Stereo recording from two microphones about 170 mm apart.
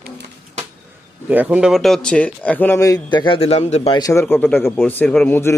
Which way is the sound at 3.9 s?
20° left (ahead or behind).